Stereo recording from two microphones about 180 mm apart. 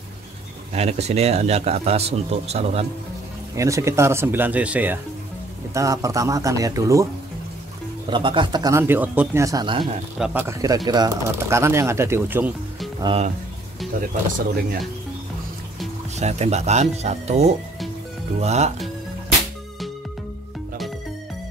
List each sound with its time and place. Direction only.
0.7 s a man's voice: 35° right (ahead or behind)
3.5 s speech: 15° right (ahead or behind)
8.1 s speech: 25° right (ahead or behind)
10.1 s speech: 5° right (ahead or behind)
10.4 s speech: 15° right (ahead or behind)
13.0 s a man's voice: 30° right (ahead or behind)
16.2 s a man's voice: 40° right (ahead or behind)